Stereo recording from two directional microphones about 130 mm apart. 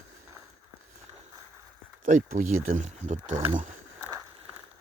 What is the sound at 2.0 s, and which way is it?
Speech, 75° right (ahead or behind).